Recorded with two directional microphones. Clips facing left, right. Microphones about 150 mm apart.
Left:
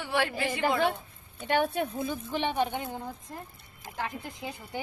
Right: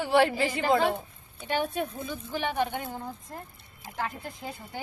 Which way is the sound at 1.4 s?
60° left (ahead or behind).